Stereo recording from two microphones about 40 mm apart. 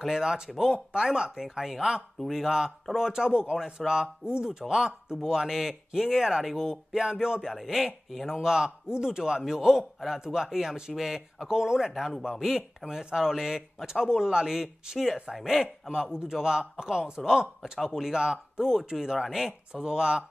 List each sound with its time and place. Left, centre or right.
0.1 s speech: centre
7.4 s a man's voice: centre
15.9 s speech: centre